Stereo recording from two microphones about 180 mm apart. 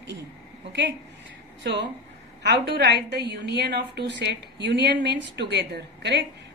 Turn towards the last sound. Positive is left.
turn(degrees=-70)  # may be behind; listen again after turning